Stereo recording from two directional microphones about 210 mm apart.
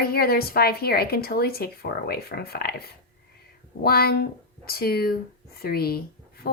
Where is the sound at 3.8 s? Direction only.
45° left (ahead or behind).